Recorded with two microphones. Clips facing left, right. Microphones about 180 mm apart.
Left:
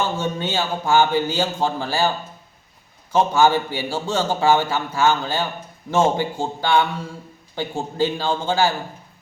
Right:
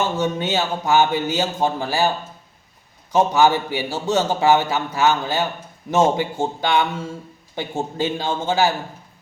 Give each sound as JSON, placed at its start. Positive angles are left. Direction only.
{"t": 0.2, "sound": "speech", "side_deg": -20}
{"t": 3.1, "sound": "speech", "side_deg": -15}